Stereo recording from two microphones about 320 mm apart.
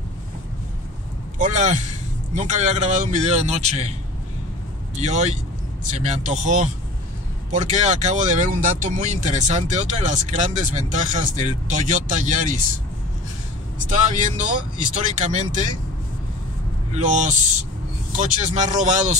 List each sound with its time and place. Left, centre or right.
1.4 s speech: right
5.0 s speech: right
13.7 s speech: right
16.9 s speech: right